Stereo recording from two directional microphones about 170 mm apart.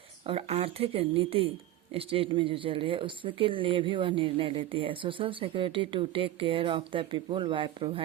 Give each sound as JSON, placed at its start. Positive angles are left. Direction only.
{"t": 0.3, "sound": "speech", "side_deg": -35}